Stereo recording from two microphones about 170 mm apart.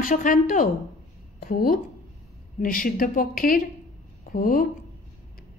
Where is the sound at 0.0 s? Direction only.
50° left (ahead or behind).